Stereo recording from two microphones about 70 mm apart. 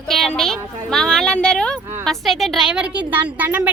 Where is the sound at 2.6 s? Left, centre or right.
Centre.